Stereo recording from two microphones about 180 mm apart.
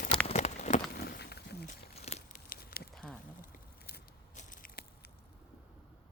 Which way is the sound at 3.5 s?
60° left (ahead or behind).